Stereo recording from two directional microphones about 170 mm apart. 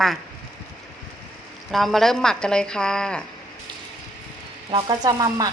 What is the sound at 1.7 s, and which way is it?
A woman's voice, centre (ahead or behind).